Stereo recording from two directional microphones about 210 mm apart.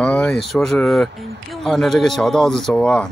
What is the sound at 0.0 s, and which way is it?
Speech, 5° left (ahead or behind).